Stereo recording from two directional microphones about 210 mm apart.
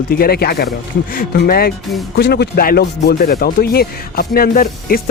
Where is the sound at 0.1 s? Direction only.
45° left (ahead or behind).